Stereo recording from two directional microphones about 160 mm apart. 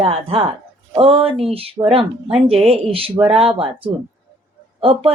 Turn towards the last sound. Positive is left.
turn(degrees=-35)  # may be behind; listen again after turning